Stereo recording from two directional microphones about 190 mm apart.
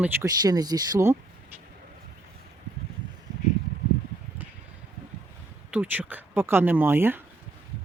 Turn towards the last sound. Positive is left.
turn(degrees=-10)  # may be behind; listen again after turning